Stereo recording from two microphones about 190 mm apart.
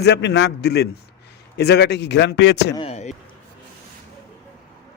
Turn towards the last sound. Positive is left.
turn(degrees=35)  # may be behind; listen again after turning